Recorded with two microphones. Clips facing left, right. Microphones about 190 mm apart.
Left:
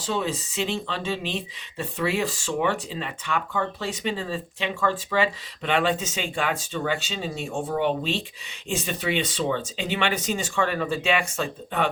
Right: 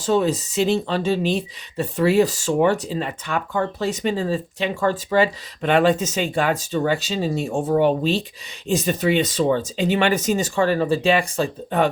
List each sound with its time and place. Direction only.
0.0 s speech: 45° right (ahead or behind)